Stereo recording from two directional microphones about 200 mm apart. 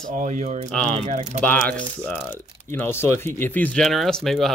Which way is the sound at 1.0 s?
35° right (ahead or behind).